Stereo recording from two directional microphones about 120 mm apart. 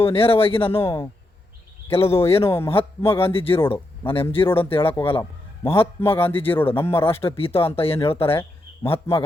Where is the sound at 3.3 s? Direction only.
50° left (ahead or behind).